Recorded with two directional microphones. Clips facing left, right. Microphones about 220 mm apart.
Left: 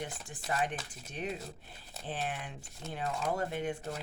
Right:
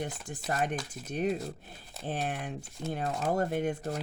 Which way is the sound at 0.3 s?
45° right (ahead or behind).